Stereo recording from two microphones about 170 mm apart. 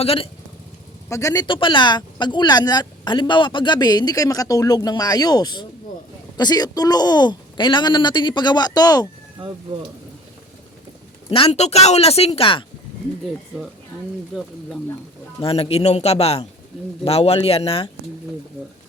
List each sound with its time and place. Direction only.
0.0 s speech: 35° left (ahead or behind)
1.1 s speech: 20° left (ahead or behind)
11.3 s speech: 35° left (ahead or behind)
15.4 s speech: 35° left (ahead or behind)